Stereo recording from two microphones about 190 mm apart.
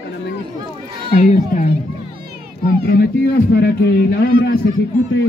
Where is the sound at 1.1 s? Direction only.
40° left (ahead or behind).